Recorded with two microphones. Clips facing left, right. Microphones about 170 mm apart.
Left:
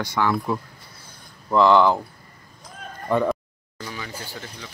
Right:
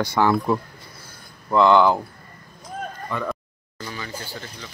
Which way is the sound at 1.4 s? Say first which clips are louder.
Even; centre (ahead or behind).